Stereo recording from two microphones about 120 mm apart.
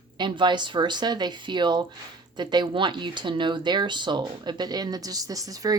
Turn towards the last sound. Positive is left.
turn(degrees=-30)  # may be behind; listen again after turning